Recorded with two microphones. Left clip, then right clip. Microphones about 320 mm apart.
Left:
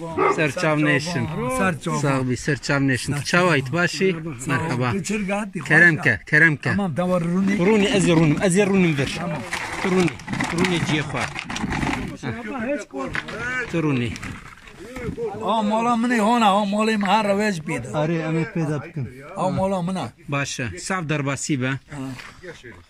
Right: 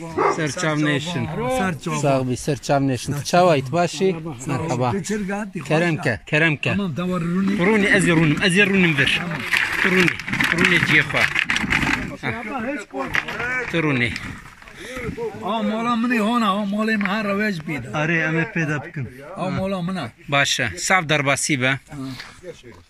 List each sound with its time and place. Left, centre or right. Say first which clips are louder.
0.4 s speech: left 2 dB; centre
5.0 s speech: left 1 dB; centre
13.6 s speech: right 3 dB; centre
15.7 s a man's voice: left 1 dB; centre
20.2 s speech: right 10 dB; centre